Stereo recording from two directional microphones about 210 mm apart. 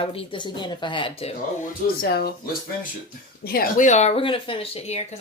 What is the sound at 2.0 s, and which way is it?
Speech, 50° left (ahead or behind).